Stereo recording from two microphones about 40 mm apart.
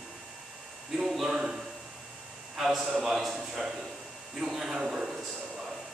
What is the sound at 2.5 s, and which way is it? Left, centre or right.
A man's voice, centre.